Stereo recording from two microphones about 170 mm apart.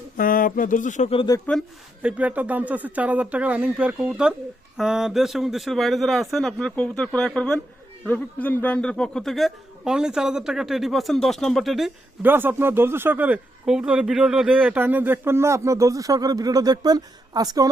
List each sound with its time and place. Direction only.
0.2 s speech: 55° left (ahead or behind)
1.1 s speech: 30° left (ahead or behind)
2.0 s a man's voice: 10° right (ahead or behind)
12.2 s speech: 10° right (ahead or behind)